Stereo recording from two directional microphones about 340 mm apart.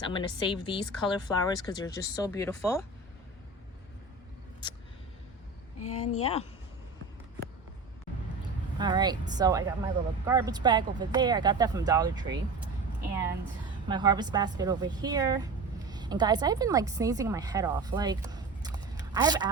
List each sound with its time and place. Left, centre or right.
0.0 s speech: centre
4.6 s a sound: centre
5.8 s speech: left
8.8 s speech: centre
13.8 s a woman's voice: centre